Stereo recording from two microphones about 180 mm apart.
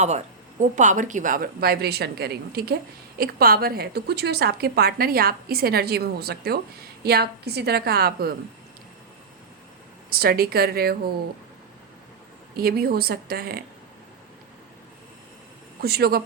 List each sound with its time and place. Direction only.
0.0 s a woman's voice: 40° right (ahead or behind); by 8.3 s 60° right (ahead or behind)
10.1 s a woman's voice: 55° right (ahead or behind)
12.5 s a woman's voice: 60° right (ahead or behind)
15.8 s a woman's voice: 60° right (ahead or behind)